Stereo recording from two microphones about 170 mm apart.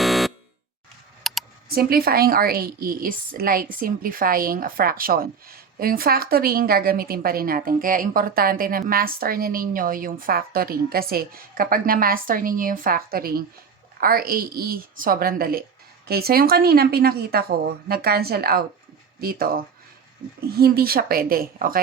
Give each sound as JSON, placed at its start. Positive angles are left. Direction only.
{"t": 0.0, "sound": "fire alarm", "side_deg": 0}
{"t": 1.2, "sound": "computer keyboard", "side_deg": 0}
{"t": 1.7, "sound": "a woman's voice", "side_deg": -60}